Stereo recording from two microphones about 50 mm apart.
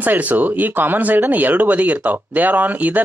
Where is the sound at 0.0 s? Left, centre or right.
Right.